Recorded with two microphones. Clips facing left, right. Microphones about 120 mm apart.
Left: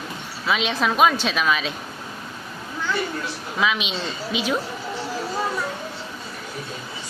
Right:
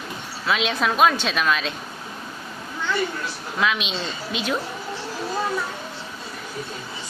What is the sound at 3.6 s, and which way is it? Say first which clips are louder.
Speech: even; centre (ahead or behind).